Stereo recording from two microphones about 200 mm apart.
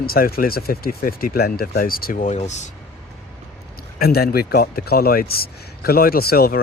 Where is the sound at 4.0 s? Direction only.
50° left (ahead or behind).